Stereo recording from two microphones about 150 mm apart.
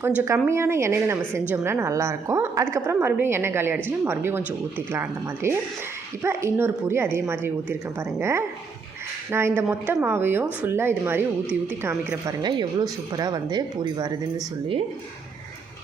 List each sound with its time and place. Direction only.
0.0 s a woman's voice: 15° right (ahead or behind)
12.4 s speech: 30° right (ahead or behind)